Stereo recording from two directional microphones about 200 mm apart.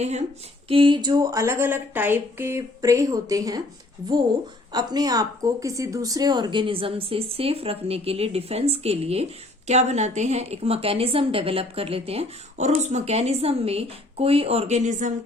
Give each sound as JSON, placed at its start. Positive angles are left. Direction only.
{"t": 0.0, "sound": "speech", "side_deg": -35}
{"t": 4.7, "sound": "a woman's voice", "side_deg": -20}